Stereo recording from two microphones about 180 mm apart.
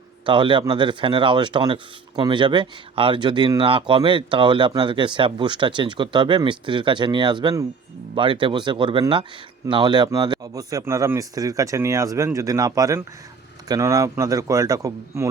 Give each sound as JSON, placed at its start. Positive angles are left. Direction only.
{"t": 0.3, "sound": "speech", "side_deg": -25}